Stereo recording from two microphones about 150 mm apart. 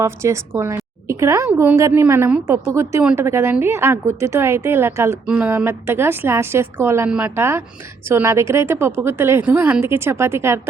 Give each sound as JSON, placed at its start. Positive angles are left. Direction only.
{"t": 0.0, "sound": "a woman's voice", "side_deg": -20}
{"t": 3.0, "sound": "a woman's voice", "side_deg": -10}
{"t": 5.2, "sound": "a woman's voice", "side_deg": -5}